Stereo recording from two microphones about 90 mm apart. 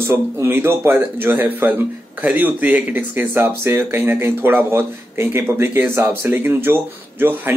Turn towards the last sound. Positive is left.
turn(degrees=-25)  # may be behind; listen again after turning